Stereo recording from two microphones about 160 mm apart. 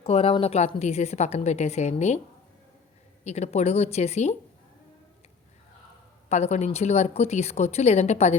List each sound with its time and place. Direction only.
0.0 s a woman's voice: 40° left (ahead or behind)
3.2 s a woman's voice: 45° left (ahead or behind)
6.2 s a woman's voice: 45° left (ahead or behind)